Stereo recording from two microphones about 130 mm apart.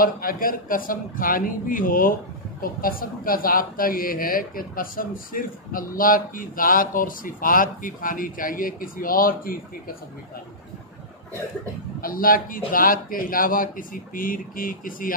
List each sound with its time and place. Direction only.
0.0 s speech: 90° left
12.0 s speech: 90° left